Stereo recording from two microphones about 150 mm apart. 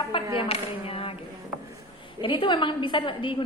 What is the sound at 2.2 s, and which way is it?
A woman's voice, 35° left (ahead or behind).